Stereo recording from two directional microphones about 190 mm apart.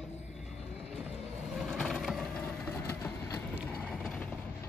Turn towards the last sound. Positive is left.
turn(degrees=5)  # may be behind; listen again after turning